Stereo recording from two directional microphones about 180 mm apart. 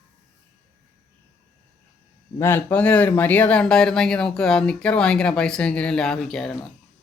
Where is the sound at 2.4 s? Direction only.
10° left (ahead or behind).